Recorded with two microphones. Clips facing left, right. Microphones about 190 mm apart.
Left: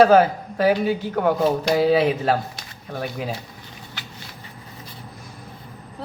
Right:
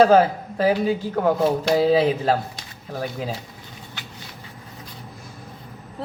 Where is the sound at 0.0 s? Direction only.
25° right (ahead or behind).